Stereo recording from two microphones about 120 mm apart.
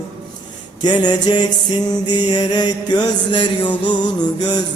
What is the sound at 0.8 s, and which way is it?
Music, 35° left (ahead or behind).